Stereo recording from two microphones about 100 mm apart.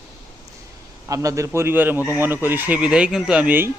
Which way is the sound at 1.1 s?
35° right (ahead or behind).